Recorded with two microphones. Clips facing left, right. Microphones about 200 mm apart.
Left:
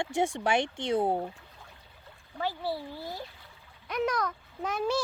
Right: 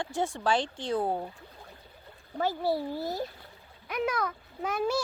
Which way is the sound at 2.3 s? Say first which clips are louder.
Right 4 dB; 45° right (ahead or behind).